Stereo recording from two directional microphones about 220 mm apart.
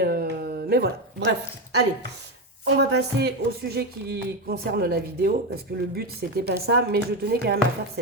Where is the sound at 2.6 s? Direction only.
50° right (ahead or behind).